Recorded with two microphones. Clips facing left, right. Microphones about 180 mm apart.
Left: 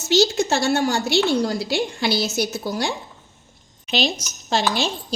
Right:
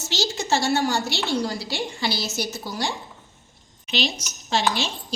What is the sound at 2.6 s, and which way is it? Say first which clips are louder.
A woman's voice: left 4 dB; 50° left (ahead or behind).